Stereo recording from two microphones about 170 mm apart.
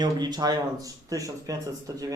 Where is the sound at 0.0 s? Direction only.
25° right (ahead or behind).